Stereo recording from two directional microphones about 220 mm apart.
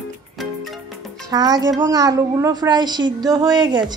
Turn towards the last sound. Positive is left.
turn(degrees=-20)  # may be behind; listen again after turning